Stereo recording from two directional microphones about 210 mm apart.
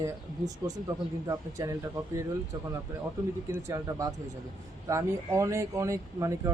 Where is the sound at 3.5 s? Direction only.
15° right (ahead or behind).